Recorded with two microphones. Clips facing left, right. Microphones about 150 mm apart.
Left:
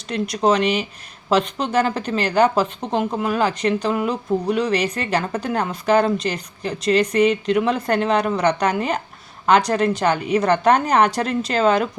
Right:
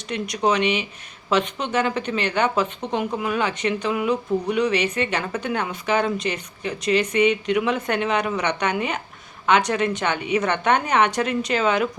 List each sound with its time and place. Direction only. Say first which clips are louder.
0.1 s speech: left 3 dB; 35° left (ahead or behind)